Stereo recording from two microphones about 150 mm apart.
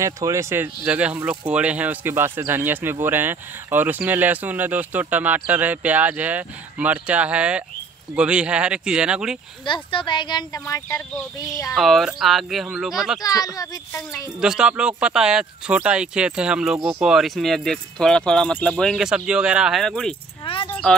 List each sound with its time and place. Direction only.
0.0 s speech: 20° right (ahead or behind)
9.7 s speech: 35° left (ahead or behind)
10.6 s speech: 15° left (ahead or behind)
11.7 s speech: centre (ahead or behind)
13.2 s speech: 25° left (ahead or behind)
14.4 s speech: 5° right (ahead or behind)
20.6 s a sound: 10° left (ahead or behind)